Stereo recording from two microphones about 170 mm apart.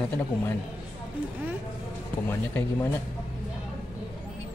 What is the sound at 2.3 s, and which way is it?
Speech, 10° left (ahead or behind).